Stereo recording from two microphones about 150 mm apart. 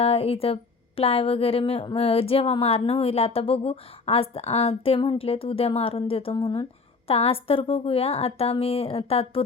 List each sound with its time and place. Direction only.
0.0 s speech: 40° left (ahead or behind)